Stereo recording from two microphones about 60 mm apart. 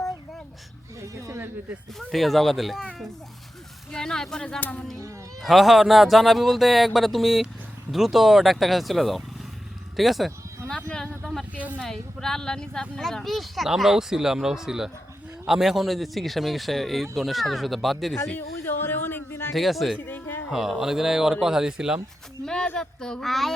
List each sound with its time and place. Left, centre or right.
2.0 s speech: centre
3.9 s speech: centre
5.4 s speech: centre
10.7 s a sound: centre
11.5 s speech: right
11.8 s speech: centre
18.3 s a sound: left
19.5 s speech: centre
20.1 s a sound: left
20.5 s speech: centre
22.4 s speech: centre